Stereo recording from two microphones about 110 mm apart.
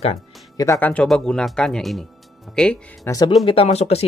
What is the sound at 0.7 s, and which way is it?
Speech, 15° left (ahead or behind).